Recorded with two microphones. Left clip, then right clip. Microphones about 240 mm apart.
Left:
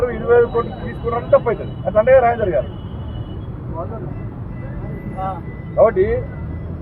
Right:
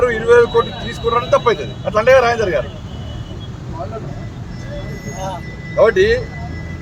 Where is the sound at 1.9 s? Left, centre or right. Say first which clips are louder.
Right 1 dB; right.